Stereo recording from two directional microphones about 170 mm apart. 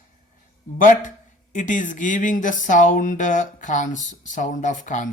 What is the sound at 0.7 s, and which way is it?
Speech, 50° left (ahead or behind).